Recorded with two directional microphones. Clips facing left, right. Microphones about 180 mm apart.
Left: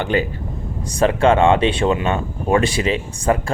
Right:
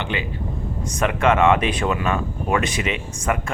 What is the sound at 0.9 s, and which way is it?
Speech, 30° left (ahead or behind).